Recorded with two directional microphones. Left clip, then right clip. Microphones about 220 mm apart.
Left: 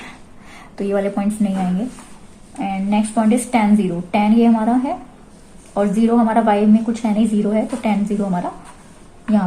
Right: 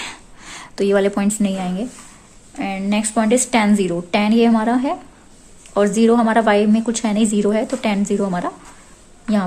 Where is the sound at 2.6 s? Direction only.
55° right (ahead or behind).